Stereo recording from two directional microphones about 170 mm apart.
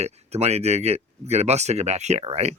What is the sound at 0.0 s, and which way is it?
Speech, 40° right (ahead or behind).